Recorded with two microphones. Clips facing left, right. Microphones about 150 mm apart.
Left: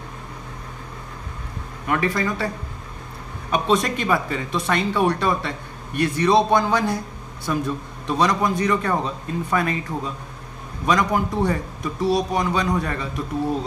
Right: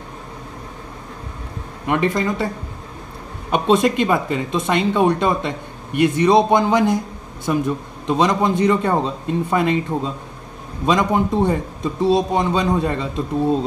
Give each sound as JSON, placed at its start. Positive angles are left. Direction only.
{"t": 1.9, "sound": "a man's voice", "side_deg": -20}
{"t": 3.5, "sound": "a man's voice", "side_deg": -25}